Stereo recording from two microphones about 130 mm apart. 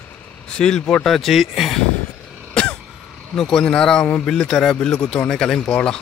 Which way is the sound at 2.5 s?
5° left (ahead or behind).